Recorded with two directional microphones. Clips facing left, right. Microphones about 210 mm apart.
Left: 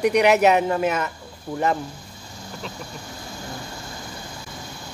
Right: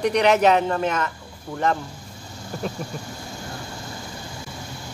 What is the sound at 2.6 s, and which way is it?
Speech, 45° right (ahead or behind).